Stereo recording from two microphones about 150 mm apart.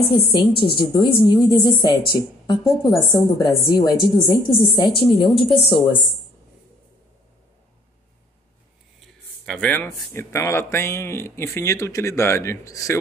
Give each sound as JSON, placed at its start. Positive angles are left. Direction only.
{"t": 0.0, "sound": "a woman's voice", "side_deg": 35}
{"t": 9.0, "sound": "speech", "side_deg": 5}